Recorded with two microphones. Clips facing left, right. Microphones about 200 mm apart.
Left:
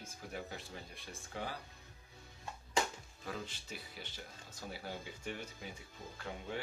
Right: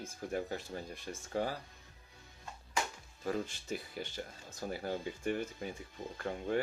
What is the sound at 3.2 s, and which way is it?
Speech, 45° right (ahead or behind).